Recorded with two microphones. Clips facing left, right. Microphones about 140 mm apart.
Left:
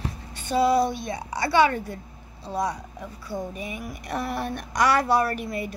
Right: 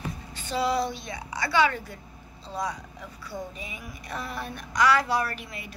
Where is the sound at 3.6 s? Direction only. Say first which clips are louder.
Left 6 dB; 60° left (ahead or behind).